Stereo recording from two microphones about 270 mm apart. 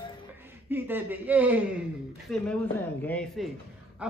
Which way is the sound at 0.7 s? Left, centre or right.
Centre.